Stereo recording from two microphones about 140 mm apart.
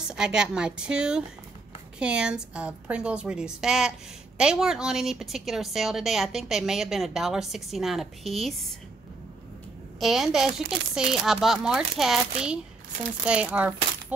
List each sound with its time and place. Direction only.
0.1 s a woman's voice: 5° right (ahead or behind)
9.9 s a woman's voice: centre (ahead or behind)